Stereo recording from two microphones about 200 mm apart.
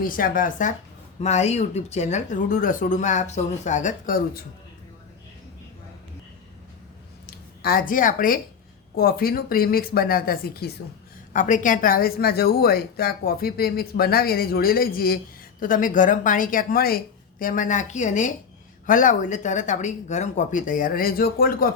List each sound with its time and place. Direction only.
0.0 s speech: 45° left (ahead or behind)
7.3 s speech: 50° left (ahead or behind)
11.3 s speech: 40° left (ahead or behind)